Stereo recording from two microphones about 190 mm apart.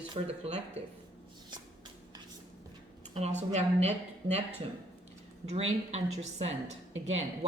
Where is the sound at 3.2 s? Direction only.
35° right (ahead or behind).